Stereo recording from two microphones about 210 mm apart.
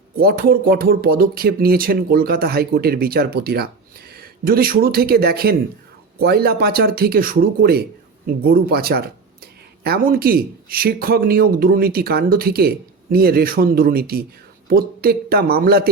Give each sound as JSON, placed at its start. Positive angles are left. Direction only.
{"t": 0.2, "sound": "speech", "side_deg": -45}